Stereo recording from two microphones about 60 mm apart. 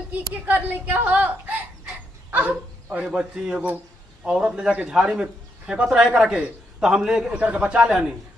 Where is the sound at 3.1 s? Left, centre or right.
Centre.